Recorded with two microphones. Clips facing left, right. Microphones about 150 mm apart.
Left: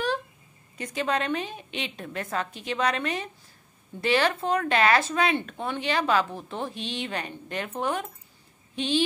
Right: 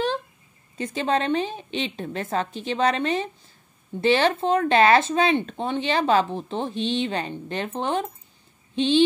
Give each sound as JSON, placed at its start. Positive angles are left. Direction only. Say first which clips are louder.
{"t": 0.7, "sound": "speech", "louder": "right 4 dB", "side_deg": -30}